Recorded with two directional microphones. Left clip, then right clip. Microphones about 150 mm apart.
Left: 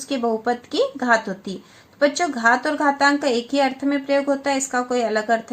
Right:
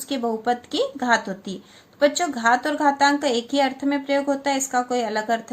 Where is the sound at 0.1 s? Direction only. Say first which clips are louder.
Left 2 dB; 35° left (ahead or behind).